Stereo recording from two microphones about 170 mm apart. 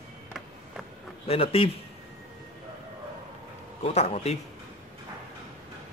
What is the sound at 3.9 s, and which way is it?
Speech, 40° left (ahead or behind).